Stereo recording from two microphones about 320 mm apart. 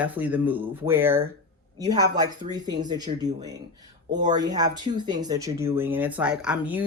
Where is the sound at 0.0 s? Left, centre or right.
Centre.